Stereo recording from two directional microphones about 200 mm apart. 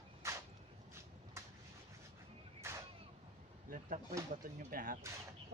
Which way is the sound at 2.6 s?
15° right (ahead or behind).